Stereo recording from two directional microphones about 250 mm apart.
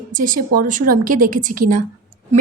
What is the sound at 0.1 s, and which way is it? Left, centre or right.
A woman's voice, right.